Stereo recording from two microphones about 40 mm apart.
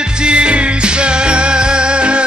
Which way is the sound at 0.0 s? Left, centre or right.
Right.